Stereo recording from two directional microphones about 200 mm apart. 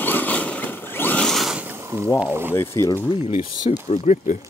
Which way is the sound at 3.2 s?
30° left (ahead or behind).